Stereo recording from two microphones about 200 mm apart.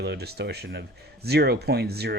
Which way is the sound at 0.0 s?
55° right (ahead or behind).